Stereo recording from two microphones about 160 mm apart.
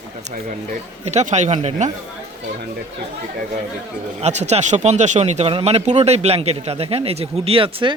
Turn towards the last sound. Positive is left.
turn(degrees=-35)  # may be behind; listen again after turning